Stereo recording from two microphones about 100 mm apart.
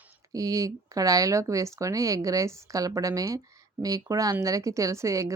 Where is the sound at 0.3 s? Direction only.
35° right (ahead or behind).